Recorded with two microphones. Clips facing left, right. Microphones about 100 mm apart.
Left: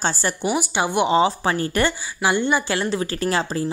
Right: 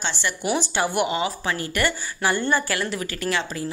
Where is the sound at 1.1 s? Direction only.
30° left (ahead or behind).